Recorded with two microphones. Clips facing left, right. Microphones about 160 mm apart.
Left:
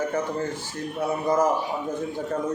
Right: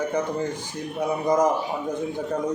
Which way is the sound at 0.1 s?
15° right (ahead or behind).